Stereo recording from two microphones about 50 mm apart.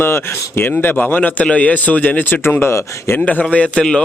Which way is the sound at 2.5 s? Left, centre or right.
Left.